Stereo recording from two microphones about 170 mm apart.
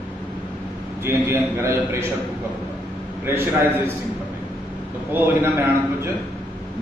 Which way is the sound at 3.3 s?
15° right (ahead or behind).